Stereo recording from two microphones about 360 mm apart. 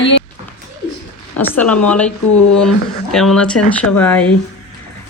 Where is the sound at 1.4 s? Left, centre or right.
Centre.